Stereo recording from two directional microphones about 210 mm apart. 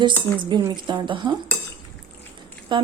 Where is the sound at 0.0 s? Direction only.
20° right (ahead or behind).